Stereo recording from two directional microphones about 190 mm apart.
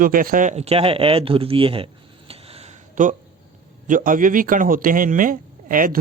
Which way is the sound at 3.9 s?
45° right (ahead or behind).